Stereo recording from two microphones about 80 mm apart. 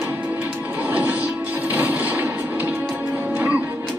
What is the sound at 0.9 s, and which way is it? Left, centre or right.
Music, right.